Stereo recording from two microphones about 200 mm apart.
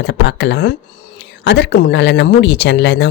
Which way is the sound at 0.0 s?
60° left (ahead or behind).